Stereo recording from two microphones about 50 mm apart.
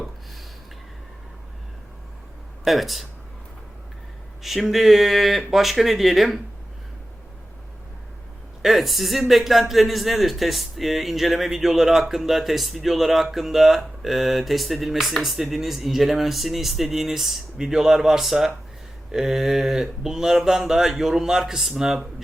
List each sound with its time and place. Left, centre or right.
2.6 s speech: centre
4.4 s speech: centre
8.6 s speech: centre
19.1 s a sound: centre